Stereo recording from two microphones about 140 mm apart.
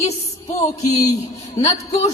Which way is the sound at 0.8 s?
25° left (ahead or behind).